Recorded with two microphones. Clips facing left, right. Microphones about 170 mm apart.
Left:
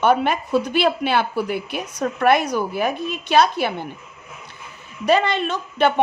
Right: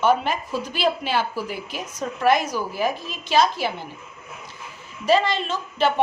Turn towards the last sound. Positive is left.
turn(degrees=60)  # may be behind; listen again after turning